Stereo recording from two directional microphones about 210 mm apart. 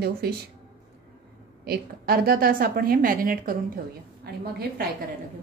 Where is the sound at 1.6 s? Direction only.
45° right (ahead or behind).